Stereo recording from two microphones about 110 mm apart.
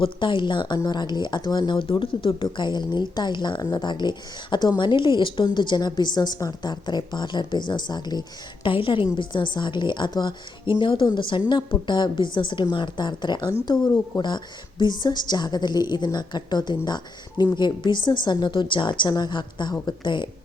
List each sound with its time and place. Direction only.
0.0 s a woman's voice: 50° left (ahead or behind)